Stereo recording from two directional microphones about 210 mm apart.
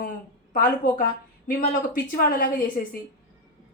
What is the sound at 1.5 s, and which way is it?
A woman's voice, 40° left (ahead or behind).